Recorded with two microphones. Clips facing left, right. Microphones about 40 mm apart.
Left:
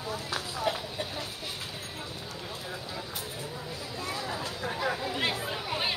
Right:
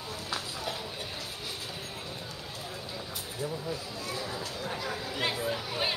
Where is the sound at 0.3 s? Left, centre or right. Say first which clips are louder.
Left 4 dB; centre.